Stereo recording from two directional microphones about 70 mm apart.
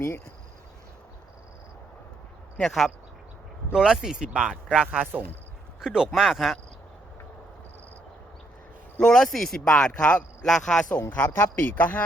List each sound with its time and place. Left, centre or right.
2.6 s speech: centre
3.7 s speech: centre
9.0 s speech: centre
10.4 s speech: centre
11.1 s a man's voice: left